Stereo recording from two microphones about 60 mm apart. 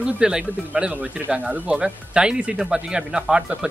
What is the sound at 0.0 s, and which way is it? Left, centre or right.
Speech, centre.